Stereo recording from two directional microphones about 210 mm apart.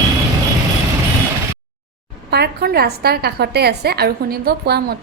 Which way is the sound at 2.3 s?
50° right (ahead or behind).